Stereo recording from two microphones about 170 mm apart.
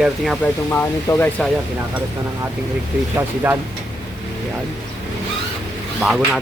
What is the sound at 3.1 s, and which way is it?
Speech, 15° right (ahead or behind).